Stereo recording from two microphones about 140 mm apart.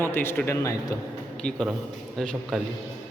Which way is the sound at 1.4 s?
5° left (ahead or behind).